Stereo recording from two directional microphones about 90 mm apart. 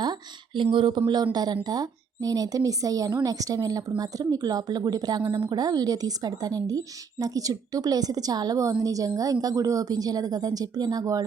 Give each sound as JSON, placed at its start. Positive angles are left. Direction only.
{"t": 0.0, "sound": "speech", "side_deg": -60}